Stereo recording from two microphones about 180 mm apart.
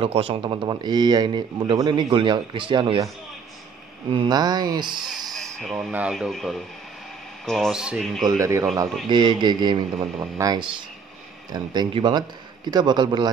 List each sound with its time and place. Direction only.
0.0 s speech: 30° right (ahead or behind)
4.1 s speech: 25° right (ahead or behind)
5.3 s speech: centre (ahead or behind)
8.3 s a man's voice: 15° right (ahead or behind)